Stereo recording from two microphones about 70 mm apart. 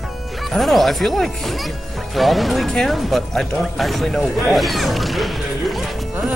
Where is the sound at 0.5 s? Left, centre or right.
Centre.